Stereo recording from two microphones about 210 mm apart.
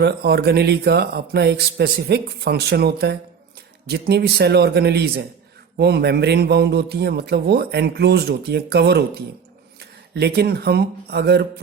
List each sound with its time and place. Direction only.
0.0 s a man's voice: 50° right (ahead or behind)
10.2 s a man's voice: 50° right (ahead or behind)